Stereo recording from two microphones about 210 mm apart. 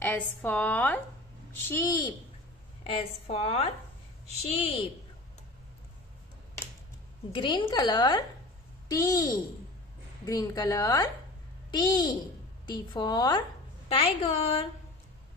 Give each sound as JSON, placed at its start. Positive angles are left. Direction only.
{"t": 0.4, "sound": "speech", "side_deg": 10}
{"t": 2.8, "sound": "a woman's voice", "side_deg": 25}
{"t": 7.3, "sound": "a woman's voice", "side_deg": 25}